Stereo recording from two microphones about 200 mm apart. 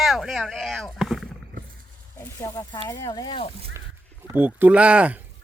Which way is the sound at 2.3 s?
15° left (ahead or behind).